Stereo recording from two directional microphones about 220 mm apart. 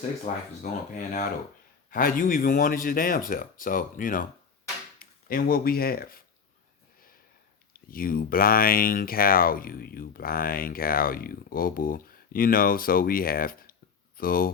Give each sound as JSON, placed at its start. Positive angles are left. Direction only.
{"t": 0.3, "sound": "speech", "side_deg": 35}
{"t": 5.3, "sound": "speech", "side_deg": 40}
{"t": 7.7, "sound": "speech", "side_deg": 40}